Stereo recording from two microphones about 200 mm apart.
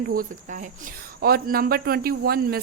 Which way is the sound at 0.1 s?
45° right (ahead or behind).